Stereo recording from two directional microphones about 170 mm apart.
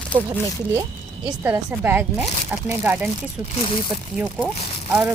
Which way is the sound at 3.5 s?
30° left (ahead or behind).